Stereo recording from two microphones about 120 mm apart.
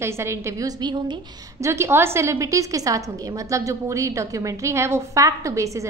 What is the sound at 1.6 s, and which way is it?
A woman's voice, 25° right (ahead or behind).